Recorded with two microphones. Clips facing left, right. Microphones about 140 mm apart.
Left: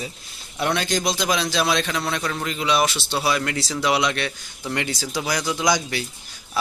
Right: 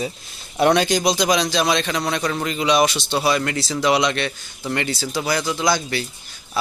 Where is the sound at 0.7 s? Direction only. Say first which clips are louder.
Right 5 dB; 15° right (ahead or behind).